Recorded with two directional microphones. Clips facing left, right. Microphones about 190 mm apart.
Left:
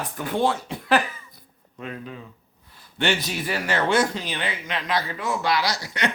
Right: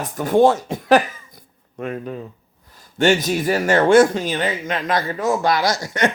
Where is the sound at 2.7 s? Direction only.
45° right (ahead or behind).